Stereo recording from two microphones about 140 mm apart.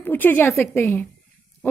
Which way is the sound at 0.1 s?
15° left (ahead or behind).